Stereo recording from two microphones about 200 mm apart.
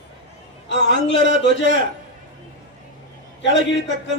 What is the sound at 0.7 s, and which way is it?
A man's voice, 60° left (ahead or behind).